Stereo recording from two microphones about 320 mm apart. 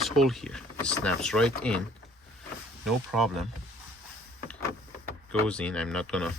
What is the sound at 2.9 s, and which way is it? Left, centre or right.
Speech, centre.